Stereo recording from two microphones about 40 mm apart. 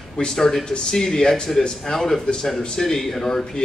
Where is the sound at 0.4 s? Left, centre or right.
Centre.